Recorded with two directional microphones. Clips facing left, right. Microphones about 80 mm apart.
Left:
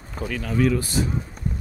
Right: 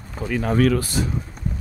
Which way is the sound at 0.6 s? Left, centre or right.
Right.